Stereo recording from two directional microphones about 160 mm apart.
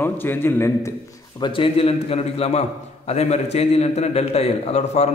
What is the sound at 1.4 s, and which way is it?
A man's voice, 35° left (ahead or behind).